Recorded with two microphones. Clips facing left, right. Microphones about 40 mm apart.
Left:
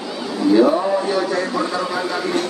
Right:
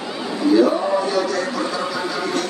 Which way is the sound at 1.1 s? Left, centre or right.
Centre.